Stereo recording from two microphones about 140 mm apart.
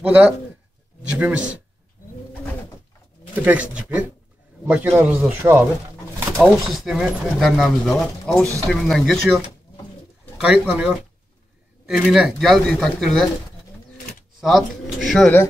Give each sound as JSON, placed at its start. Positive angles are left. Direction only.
{"t": 0.0, "sound": "a man's voice", "side_deg": -10}
{"t": 4.6, "sound": "a man's voice", "side_deg": -10}
{"t": 6.3, "sound": "a man's voice", "side_deg": 0}
{"t": 14.4, "sound": "speech", "side_deg": 0}